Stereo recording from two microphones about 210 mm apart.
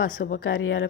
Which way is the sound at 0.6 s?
65° left (ahead or behind).